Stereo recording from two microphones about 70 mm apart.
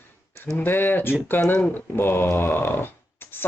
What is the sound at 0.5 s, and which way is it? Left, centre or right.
Speech, left.